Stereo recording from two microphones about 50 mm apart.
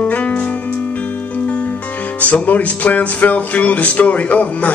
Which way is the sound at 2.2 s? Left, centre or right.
Left.